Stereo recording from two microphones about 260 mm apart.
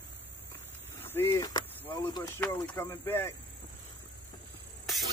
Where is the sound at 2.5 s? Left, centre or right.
Centre.